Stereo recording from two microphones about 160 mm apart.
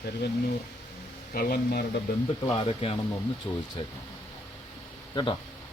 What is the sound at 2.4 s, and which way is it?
Speech, 35° left (ahead or behind).